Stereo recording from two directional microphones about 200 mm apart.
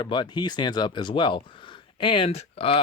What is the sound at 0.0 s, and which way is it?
Speech, 20° left (ahead or behind).